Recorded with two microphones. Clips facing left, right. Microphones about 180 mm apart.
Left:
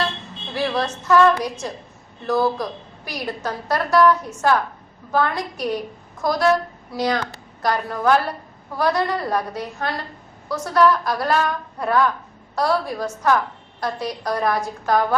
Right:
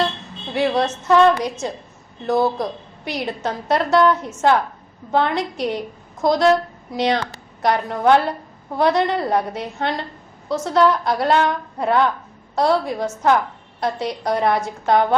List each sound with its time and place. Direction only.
0.5 s a woman's voice: 20° right (ahead or behind)